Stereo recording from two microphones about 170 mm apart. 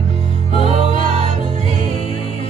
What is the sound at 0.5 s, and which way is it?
Music, 40° right (ahead or behind).